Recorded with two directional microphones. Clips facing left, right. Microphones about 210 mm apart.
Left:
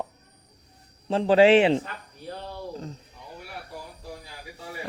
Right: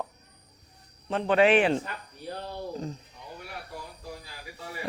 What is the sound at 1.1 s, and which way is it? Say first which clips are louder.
Speech: left 5 dB; 30° left (ahead or behind).